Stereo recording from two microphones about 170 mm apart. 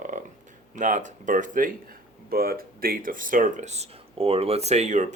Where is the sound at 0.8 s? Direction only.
45° right (ahead or behind).